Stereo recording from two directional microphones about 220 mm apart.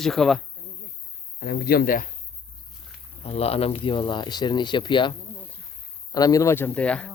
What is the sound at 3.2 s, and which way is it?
Speech, 25° left (ahead or behind).